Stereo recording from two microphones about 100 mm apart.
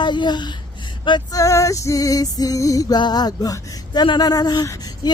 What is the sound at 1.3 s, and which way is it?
Music, 30° left (ahead or behind).